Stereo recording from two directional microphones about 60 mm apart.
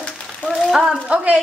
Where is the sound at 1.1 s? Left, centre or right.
Centre.